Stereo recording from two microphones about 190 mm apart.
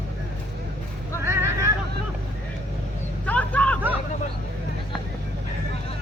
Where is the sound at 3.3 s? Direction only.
5° left (ahead or behind).